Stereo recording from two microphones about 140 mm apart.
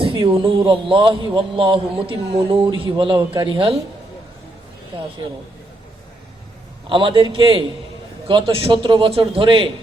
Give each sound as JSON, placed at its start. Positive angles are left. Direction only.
{"t": 0.0, "sound": "a man's voice", "side_deg": -40}
{"t": 6.8, "sound": "a man's voice", "side_deg": -35}